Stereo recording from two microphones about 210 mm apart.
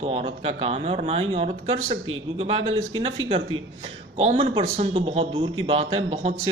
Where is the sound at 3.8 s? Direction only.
30° right (ahead or behind).